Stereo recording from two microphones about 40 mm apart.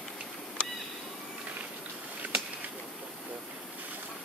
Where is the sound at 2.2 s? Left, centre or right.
Right.